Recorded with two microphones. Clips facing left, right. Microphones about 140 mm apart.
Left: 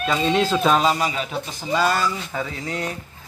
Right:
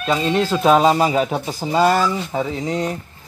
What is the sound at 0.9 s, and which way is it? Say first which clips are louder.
Speech: right 7 dB; 35° right (ahead or behind).